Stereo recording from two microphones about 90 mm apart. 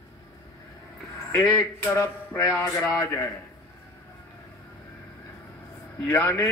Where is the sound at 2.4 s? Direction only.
35° left (ahead or behind).